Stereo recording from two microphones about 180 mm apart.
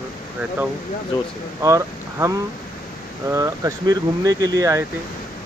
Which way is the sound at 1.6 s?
20° right (ahead or behind).